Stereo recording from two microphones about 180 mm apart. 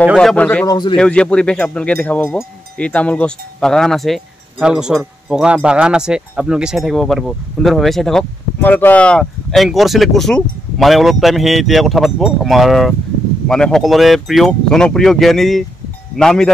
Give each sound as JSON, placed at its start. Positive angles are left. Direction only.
{"t": 0.2, "sound": "speech", "side_deg": 5}
{"t": 0.7, "sound": "speech", "side_deg": 25}
{"t": 0.9, "sound": "speech", "side_deg": 5}